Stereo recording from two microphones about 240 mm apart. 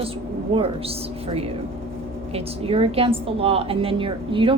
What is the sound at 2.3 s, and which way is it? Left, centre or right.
A woman's voice, right.